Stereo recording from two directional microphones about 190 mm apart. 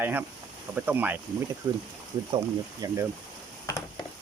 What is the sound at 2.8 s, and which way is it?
Speech, 15° right (ahead or behind).